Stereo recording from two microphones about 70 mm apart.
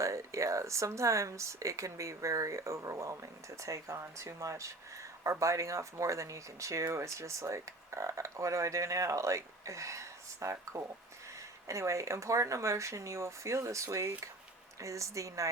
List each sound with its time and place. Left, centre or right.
0.0 s speech: right